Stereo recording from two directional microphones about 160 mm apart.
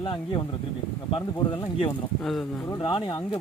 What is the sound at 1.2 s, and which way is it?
Speech, 25° left (ahead or behind).